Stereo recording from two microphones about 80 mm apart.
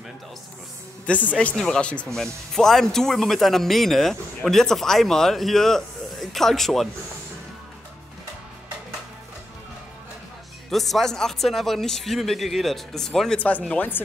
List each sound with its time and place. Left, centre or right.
1.0 s speech: centre
10.7 s speech: centre
13.7 s speech: left